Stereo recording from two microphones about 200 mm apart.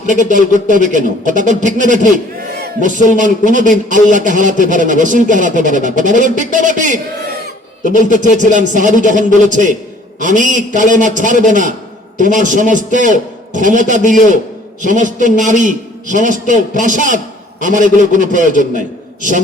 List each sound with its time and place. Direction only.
0.1 s speech: 40° right (ahead or behind)